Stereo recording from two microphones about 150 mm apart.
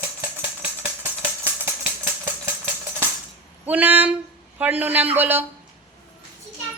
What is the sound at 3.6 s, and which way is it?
A man's voice, 10° right (ahead or behind).